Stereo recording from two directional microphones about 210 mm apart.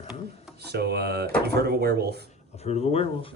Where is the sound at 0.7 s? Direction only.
50° right (ahead or behind).